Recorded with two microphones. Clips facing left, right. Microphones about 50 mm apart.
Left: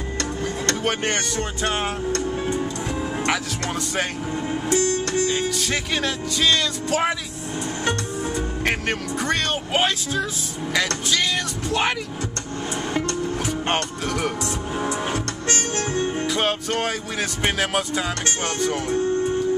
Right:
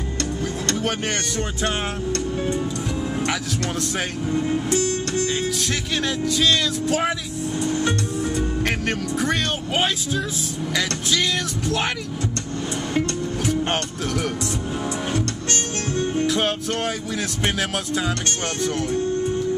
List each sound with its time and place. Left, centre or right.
0.8 s speech: centre
3.8 s speech: centre
8.6 s speech: centre
14.0 s speech: centre
15.9 s music: left
16.3 s speech: centre